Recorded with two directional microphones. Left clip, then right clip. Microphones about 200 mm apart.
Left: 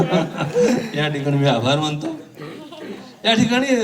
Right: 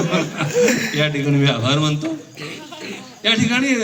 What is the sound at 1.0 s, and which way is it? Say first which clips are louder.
A man's voice: right 1 dB; 55° left (ahead or behind).